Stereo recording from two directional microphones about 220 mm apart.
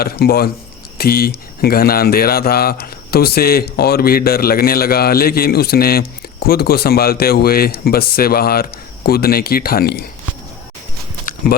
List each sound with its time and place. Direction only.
0.0 s speech: 45° left (ahead or behind)